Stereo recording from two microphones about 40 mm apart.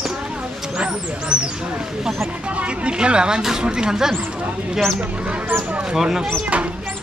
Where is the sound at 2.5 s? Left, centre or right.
Right; by 4.2 s centre.